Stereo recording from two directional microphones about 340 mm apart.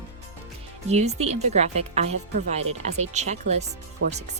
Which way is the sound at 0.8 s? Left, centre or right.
Centre.